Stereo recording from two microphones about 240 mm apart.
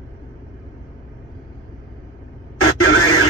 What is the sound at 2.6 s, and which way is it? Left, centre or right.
Radio, left.